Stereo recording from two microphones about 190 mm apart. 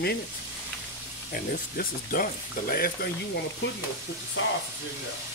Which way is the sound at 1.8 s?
50° left (ahead or behind).